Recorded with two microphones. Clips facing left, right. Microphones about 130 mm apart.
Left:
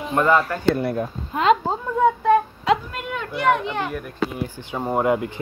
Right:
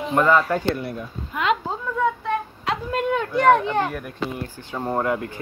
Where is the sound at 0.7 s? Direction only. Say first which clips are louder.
Left 7 dB; 45° left (ahead or behind).